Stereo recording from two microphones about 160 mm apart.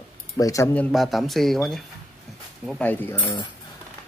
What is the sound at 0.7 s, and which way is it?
Speech, 5° left (ahead or behind).